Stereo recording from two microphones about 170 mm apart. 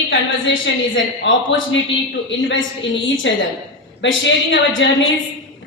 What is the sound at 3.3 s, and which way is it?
A woman's voice, 90° left.